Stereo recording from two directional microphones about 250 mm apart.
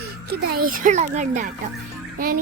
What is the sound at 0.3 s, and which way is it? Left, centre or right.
A child's voice, right.